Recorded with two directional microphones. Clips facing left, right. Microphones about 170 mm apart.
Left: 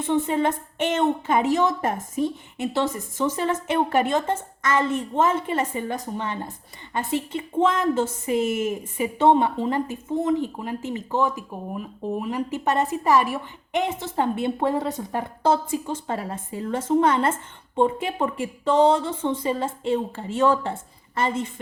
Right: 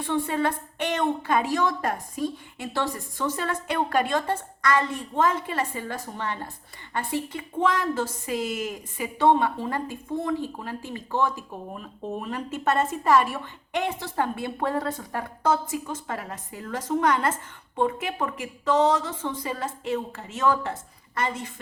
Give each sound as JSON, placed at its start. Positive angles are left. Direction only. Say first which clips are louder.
{"t": 0.0, "sound": "a woman's voice", "louder": "left 3 dB", "side_deg": 20}